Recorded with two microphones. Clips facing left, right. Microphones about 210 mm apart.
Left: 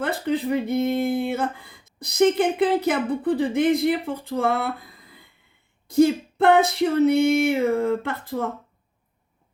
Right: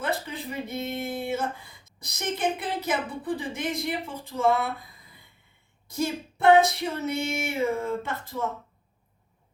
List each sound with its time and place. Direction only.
0.0 s speech: 60° left (ahead or behind)
5.9 s speech: 60° left (ahead or behind)